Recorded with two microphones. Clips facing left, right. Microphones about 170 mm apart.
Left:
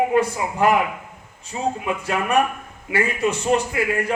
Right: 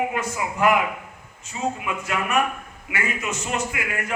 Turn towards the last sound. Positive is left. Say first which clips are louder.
# left 7 dB
turn(degrees=35)  # may be behind; listen again after turning